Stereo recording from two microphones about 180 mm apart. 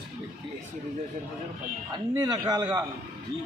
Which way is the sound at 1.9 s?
20° right (ahead or behind).